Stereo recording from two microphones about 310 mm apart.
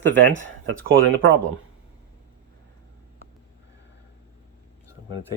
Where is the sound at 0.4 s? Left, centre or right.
Right.